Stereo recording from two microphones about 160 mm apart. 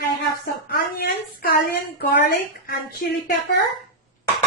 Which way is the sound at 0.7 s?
70° left (ahead or behind).